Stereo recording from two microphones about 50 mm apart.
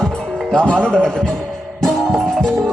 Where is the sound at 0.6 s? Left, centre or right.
Centre.